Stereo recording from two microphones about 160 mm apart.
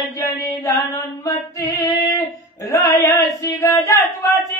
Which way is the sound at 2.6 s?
20° left (ahead or behind).